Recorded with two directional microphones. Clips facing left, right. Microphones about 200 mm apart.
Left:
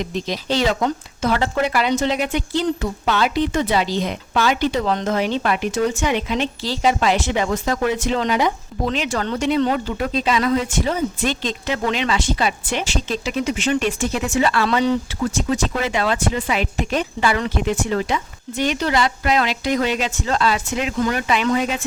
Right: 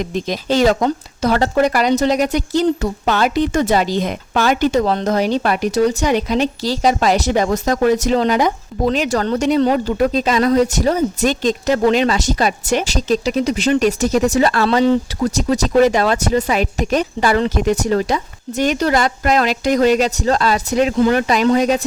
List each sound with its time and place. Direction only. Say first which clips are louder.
0.0 s speech: right 3 dB; 50° right (ahead or behind)